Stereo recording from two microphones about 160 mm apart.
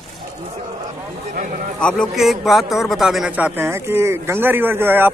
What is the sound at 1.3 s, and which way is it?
Speech, 55° right (ahead or behind).